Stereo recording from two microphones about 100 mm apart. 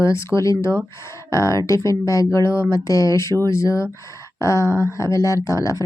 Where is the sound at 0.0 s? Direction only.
30° left (ahead or behind).